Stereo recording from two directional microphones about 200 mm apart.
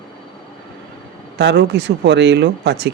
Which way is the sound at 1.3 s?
60° right (ahead or behind).